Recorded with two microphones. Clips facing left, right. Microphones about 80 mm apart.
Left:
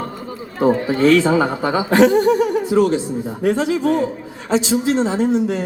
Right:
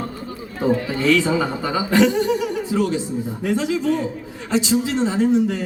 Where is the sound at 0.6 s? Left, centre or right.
Left.